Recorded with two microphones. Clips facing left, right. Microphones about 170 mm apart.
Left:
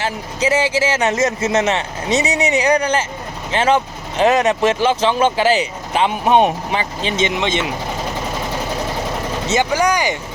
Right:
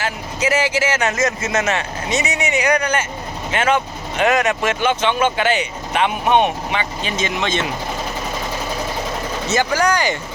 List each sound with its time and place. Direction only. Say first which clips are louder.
0.0 s speech: left 2 dB; 30° left (ahead or behind)
9.5 s speech: left 1 dB; 20° left (ahead or behind)